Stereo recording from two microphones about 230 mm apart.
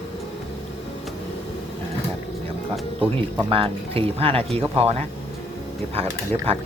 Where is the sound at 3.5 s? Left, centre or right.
Right.